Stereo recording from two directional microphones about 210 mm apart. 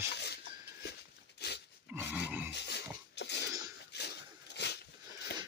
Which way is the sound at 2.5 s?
55° left (ahead or behind).